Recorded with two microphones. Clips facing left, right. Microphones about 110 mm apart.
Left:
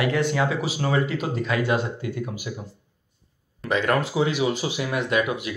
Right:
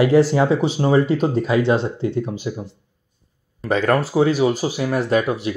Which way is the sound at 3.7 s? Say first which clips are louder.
Right 4 dB; 35° right (ahead or behind).